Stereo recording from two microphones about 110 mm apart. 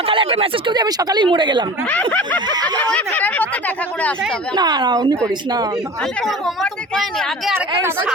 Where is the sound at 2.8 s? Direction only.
10° left (ahead or behind).